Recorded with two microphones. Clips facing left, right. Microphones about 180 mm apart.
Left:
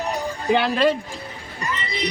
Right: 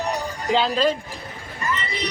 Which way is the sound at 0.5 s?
65° left (ahead or behind).